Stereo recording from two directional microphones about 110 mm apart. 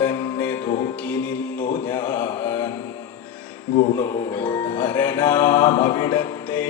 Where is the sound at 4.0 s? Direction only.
20° left (ahead or behind).